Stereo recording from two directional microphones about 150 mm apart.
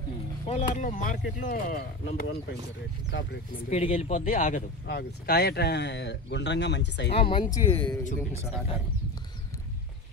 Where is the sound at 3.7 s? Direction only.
40° left (ahead or behind).